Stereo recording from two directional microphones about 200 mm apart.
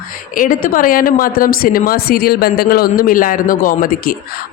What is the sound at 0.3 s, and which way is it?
Speech, 40° left (ahead or behind).